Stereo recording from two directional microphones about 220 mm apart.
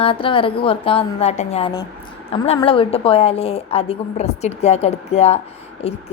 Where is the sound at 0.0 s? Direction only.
25° left (ahead or behind).